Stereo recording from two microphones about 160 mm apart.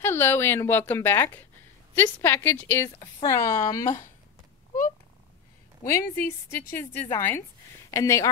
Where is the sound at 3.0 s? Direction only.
25° left (ahead or behind).